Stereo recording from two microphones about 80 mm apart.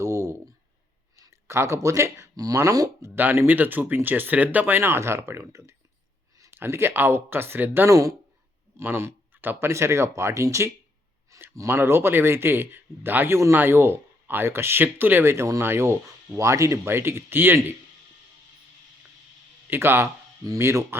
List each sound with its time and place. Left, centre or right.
0.0 s a sound: right
1.1 s speech: right
3.2 s speech: right
6.5 s speech: right
7.9 s speech: right
8.8 s speech: right
19.7 s speech: right